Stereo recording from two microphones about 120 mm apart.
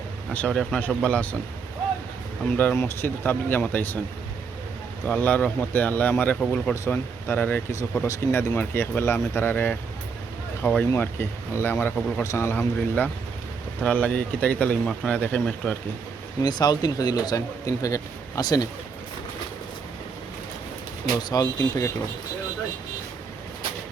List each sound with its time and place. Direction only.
0.3 s speech: 5° left (ahead or behind)
2.4 s speech: 15° left (ahead or behind)
5.0 s speech: 10° left (ahead or behind)
12.2 s speech: 25° left (ahead or behind)
16.4 s speech: 35° left (ahead or behind)
21.2 s speech: 35° left (ahead or behind)
21.4 s speech: 20° left (ahead or behind)